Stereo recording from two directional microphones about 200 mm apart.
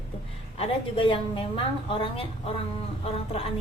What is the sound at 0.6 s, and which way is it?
A woman's voice, 25° left (ahead or behind).